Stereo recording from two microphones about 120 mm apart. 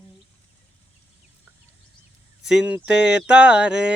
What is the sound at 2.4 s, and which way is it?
Speech, 5° right (ahead or behind).